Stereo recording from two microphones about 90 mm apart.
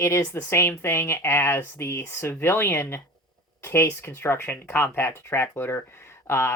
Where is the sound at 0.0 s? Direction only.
30° left (ahead or behind).